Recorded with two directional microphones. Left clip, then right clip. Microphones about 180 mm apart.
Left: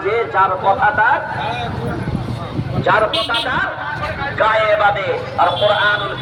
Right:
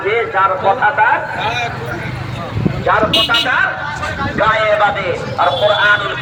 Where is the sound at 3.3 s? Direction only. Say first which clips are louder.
Right 5 dB; 5° left (ahead or behind).